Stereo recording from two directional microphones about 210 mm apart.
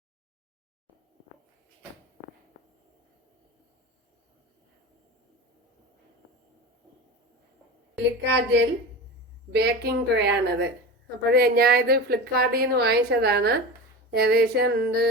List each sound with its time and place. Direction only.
7.9 s a woman's voice: 55° right (ahead or behind)